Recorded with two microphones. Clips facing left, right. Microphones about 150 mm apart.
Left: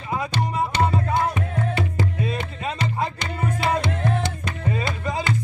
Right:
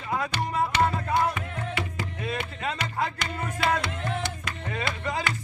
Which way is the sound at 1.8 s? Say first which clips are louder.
Left 7 dB; 25° left (ahead or behind).